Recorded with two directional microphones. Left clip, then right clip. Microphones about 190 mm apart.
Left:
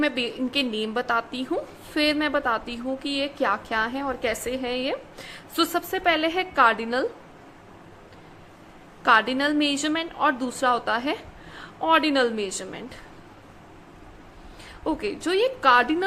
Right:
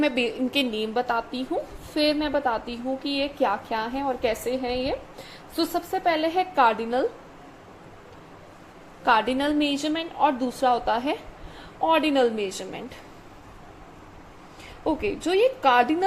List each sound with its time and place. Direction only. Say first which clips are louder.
0.0 s a woman's voice: right 1 dB; 10° right (ahead or behind)
9.0 s a woman's voice: left 2 dB; 5° right (ahead or behind)
14.8 s a woman's voice: right 1 dB; centre (ahead or behind)